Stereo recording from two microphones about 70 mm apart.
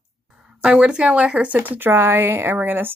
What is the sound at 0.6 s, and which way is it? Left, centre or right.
Speech, centre.